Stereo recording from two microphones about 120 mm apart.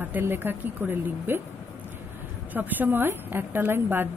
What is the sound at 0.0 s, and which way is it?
A woman's voice, 15° right (ahead or behind).